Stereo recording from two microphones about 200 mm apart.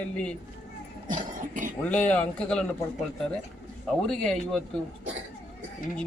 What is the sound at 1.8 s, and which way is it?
Speech, 5° left (ahead or behind).